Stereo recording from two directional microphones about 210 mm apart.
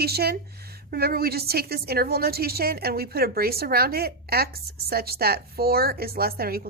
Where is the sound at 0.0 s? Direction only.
50° right (ahead or behind).